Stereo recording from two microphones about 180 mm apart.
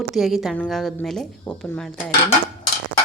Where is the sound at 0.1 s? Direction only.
Centre (ahead or behind).